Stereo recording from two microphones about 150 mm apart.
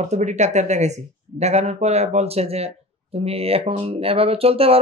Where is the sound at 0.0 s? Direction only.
50° right (ahead or behind).